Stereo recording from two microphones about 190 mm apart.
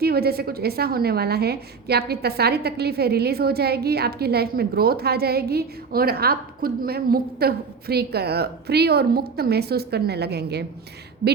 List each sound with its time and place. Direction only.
0.0 s a woman's voice: 55° right (ahead or behind)